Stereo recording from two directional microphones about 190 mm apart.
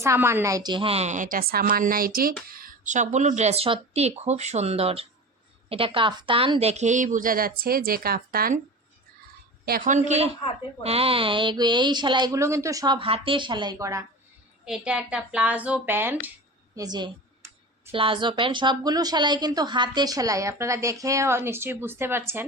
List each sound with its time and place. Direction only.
0.0 s a woman's voice: 15° right (ahead or behind); by 8.6 s 50° right (ahead or behind)
9.6 s a woman's voice: 45° right (ahead or behind); by 14.1 s 15° right (ahead or behind)
14.6 s speech: 5° right (ahead or behind)
16.7 s a sound: 20° right (ahead or behind)
17.9 s a woman's voice: 25° right (ahead or behind); by 22.4 s 10° right (ahead or behind)